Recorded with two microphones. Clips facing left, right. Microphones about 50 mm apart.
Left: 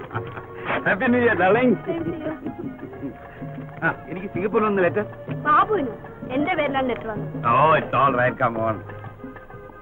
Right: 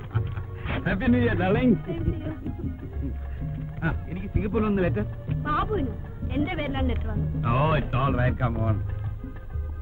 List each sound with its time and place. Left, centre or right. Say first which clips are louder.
0.1 s speech: left 2 dB; left
3.5 s speech: left 7 dB; left